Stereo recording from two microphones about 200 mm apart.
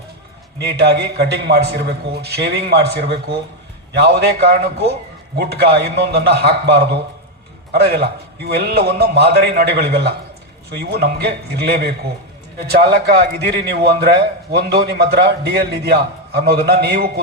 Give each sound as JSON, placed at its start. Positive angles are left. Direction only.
{"t": 0.6, "sound": "a man's voice", "side_deg": -55}